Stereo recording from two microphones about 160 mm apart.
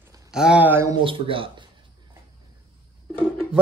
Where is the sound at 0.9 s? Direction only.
30° right (ahead or behind).